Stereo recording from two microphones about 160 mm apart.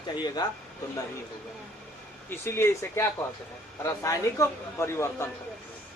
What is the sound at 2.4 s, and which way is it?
A man's voice, 15° left (ahead or behind).